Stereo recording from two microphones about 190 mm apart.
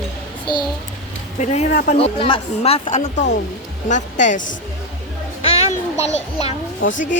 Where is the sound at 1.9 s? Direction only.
30° left (ahead or behind).